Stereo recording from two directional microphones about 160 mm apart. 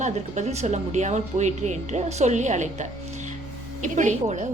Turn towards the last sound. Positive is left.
turn(degrees=-50)  # may be behind; listen again after turning